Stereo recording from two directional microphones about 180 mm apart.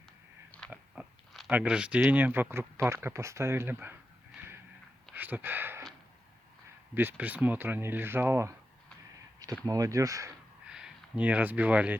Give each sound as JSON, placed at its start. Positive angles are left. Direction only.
{"t": 0.7, "sound": "a sound", "side_deg": -5}
{"t": 2.0, "sound": "speech", "side_deg": -10}
{"t": 4.4, "sound": "a sound", "side_deg": -15}
{"t": 5.1, "sound": "speech", "side_deg": -10}
{"t": 6.9, "sound": "speech", "side_deg": -10}
{"t": 9.6, "sound": "speech", "side_deg": -20}
{"t": 10.7, "sound": "speech", "side_deg": -5}